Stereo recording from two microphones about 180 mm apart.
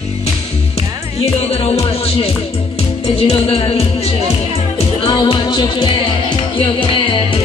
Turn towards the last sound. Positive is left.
turn(degrees=30)  # may be behind; listen again after turning